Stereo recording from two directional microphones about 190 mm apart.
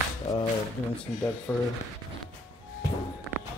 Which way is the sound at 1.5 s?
10° left (ahead or behind).